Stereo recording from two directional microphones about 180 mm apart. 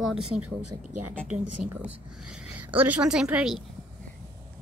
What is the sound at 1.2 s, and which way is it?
A woman's voice, 5° right (ahead or behind).